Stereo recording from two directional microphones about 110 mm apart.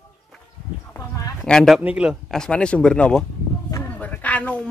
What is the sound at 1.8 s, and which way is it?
Speech, 10° right (ahead or behind).